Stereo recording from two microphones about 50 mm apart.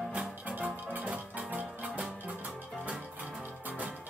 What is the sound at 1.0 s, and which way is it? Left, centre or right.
Music, right.